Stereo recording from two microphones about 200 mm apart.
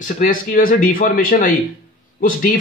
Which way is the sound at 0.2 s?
45° left (ahead or behind).